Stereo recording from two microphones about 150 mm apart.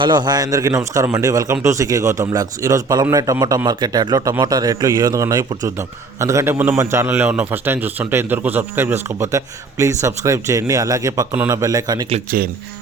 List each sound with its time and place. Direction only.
0.0 s a man's voice: 30° right (ahead or behind)